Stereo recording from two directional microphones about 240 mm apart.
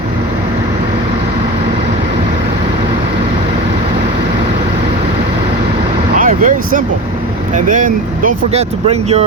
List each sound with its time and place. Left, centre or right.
6.1 s speech: right